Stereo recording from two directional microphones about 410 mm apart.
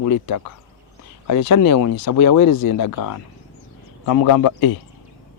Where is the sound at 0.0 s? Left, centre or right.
Left.